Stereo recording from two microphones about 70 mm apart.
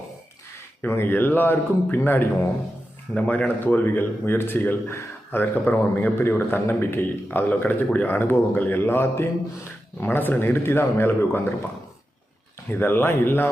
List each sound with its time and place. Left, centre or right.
0.8 s a man's voice: left
3.2 s a man's voice: centre
3.8 s a man's voice: left
12.7 s a man's voice: left